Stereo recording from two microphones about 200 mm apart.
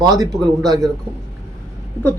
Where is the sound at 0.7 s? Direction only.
20° right (ahead or behind).